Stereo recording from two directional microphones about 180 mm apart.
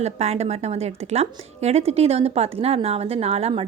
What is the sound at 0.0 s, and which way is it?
A woman's voice, 35° right (ahead or behind).